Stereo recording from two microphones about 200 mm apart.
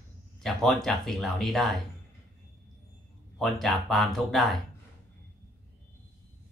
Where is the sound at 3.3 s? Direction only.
Centre (ahead or behind).